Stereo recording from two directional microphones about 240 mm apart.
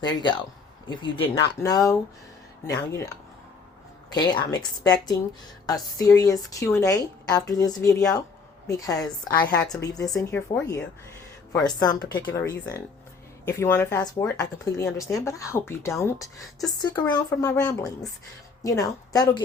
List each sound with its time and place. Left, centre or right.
0.0 s speech: centre
10.2 s speech: centre